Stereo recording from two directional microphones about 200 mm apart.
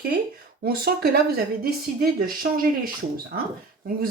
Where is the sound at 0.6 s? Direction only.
50° right (ahead or behind).